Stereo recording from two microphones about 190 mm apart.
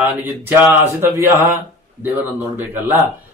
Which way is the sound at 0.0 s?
10° right (ahead or behind).